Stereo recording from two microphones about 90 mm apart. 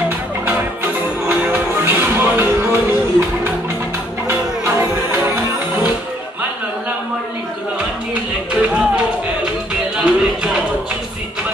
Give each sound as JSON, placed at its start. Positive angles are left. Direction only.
{"t": 1.2, "sound": "music", "side_deg": -20}
{"t": 8.1, "sound": "music", "side_deg": -15}